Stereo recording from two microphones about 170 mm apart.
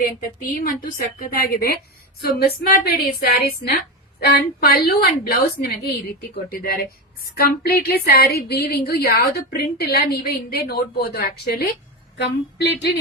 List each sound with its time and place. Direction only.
0.0 s speech: 50° left (ahead or behind)
12.1 s speech: 80° left